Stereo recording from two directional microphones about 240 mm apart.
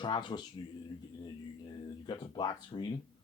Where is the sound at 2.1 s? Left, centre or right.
Centre.